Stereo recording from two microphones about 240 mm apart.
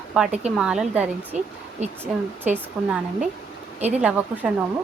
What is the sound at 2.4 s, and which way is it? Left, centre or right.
Speech, centre.